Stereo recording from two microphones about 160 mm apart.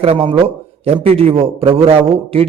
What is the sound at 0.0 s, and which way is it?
A man's voice, 35° right (ahead or behind).